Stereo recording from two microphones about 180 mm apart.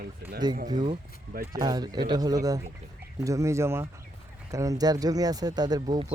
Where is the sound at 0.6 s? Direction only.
25° right (ahead or behind).